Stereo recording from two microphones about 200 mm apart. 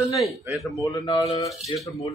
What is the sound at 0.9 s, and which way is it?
Speech, 20° left (ahead or behind).